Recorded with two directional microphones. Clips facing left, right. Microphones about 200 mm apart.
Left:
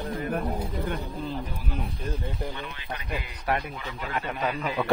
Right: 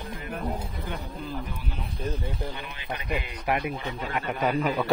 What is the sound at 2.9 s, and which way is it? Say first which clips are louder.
Speech: right 5 dB; 20° right (ahead or behind).